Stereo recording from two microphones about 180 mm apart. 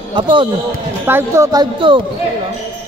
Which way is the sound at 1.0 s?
15° right (ahead or behind).